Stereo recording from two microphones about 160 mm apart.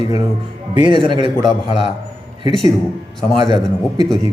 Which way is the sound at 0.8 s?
30° right (ahead or behind).